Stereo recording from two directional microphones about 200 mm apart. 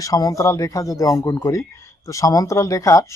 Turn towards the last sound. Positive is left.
turn(degrees=15)  # may be behind; listen again after turning